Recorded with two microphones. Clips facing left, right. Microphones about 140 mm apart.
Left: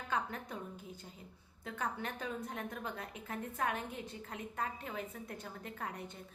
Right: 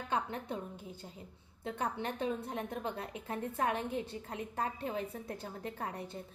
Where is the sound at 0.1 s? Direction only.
30° right (ahead or behind).